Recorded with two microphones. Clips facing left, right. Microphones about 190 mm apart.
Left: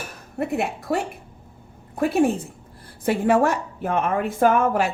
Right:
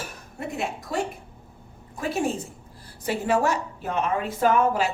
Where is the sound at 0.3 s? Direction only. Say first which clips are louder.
Left 6 dB; 60° left (ahead or behind).